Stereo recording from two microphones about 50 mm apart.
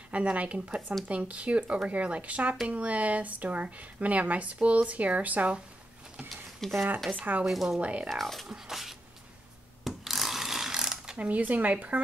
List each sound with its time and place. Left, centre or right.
0.1 s speech: right
6.6 s speech: centre
7.1 s speech: right
7.4 s speech: centre
7.8 s speech: right
8.1 s speech: centre
8.5 s speech: centre
9.8 s ratchet: centre
11.1 s speech: right